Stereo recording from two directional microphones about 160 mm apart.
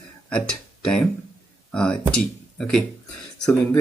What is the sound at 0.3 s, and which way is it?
Speech, 5° left (ahead or behind).